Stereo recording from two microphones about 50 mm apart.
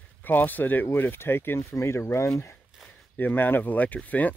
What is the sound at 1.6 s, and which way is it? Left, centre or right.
Speech, left.